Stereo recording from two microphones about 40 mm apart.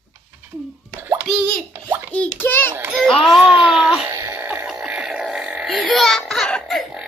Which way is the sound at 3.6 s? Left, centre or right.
Centre.